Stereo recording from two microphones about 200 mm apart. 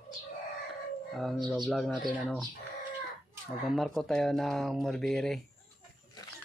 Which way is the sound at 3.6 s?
Centre (ahead or behind).